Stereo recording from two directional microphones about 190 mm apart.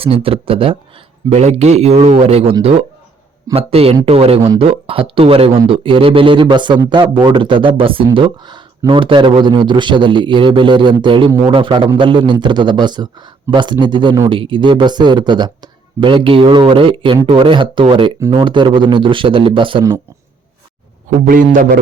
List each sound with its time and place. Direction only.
0.0 s speech: 30° right (ahead or behind)
21.2 s a man's voice: 45° right (ahead or behind)